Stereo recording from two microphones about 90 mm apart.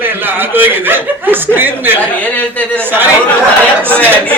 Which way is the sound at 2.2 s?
15° left (ahead or behind).